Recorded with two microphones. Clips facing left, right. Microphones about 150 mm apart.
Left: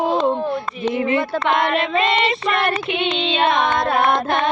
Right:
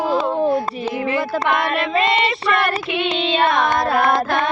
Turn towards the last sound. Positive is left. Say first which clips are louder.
# right 1 dB
turn(degrees=20)  # may be behind; listen again after turning